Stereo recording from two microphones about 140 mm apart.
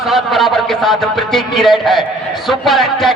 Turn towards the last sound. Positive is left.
turn(degrees=0)  # may be behind; listen again after turning